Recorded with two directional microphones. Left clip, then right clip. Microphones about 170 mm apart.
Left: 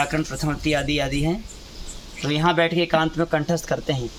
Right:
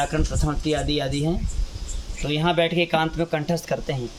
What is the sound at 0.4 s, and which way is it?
Speech, 20° left (ahead or behind).